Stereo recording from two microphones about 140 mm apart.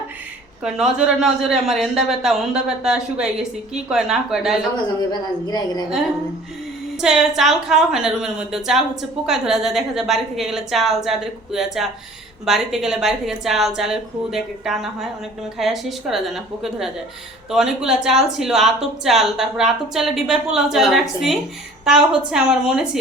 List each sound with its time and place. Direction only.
0.6 s a woman's voice: 5° right (ahead or behind)
4.9 s a woman's voice: 30° left (ahead or behind)
7.0 s a woman's voice: centre (ahead or behind)